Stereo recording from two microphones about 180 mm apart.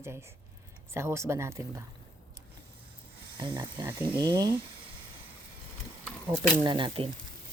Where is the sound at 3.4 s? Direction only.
25° right (ahead or behind).